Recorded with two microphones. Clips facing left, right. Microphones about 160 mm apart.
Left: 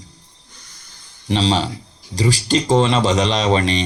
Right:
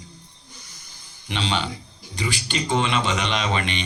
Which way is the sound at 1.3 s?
35° left (ahead or behind).